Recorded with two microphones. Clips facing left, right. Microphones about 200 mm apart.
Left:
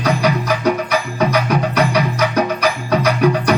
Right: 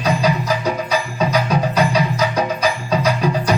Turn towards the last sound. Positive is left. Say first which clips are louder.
# left 3 dB
turn(degrees=65)  # may be behind; listen again after turning